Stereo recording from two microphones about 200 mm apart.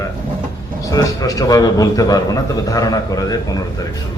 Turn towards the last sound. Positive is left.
turn(degrees=20)  # may be behind; listen again after turning